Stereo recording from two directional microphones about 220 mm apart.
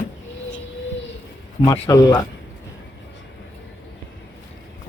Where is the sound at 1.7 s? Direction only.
15° left (ahead or behind).